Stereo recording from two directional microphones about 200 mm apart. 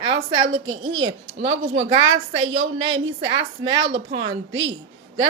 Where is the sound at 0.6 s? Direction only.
85° right.